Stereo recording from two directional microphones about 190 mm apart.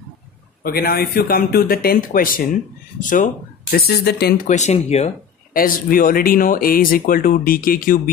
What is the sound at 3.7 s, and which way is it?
Speech, 55° left (ahead or behind).